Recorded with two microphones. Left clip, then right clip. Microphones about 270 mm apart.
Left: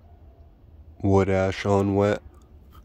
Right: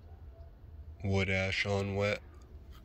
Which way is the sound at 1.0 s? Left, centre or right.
Left.